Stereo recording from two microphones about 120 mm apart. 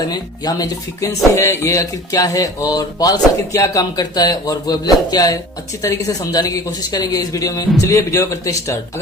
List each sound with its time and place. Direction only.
0.1 s speech: 35° left (ahead or behind)